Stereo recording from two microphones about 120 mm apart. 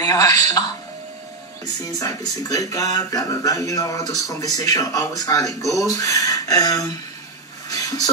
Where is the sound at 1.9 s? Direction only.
25° left (ahead or behind).